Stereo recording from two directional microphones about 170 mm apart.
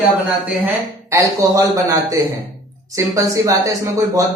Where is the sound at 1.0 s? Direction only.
20° right (ahead or behind).